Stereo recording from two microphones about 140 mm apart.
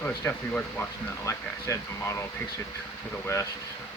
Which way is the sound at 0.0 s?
10° left (ahead or behind).